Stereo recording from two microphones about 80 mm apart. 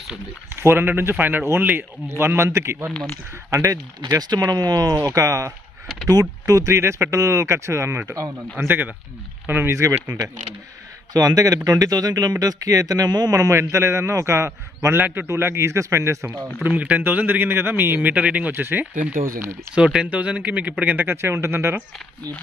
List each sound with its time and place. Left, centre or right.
0.5 s a man's voice: right
2.0 s speech: right
3.4 s speech: right
8.6 s a man's voice: right
11.1 s speech: right
15.0 s a man's voice: right
16.6 s a man's voice: centre
19.7 s a man's voice: centre; by 21.8 s right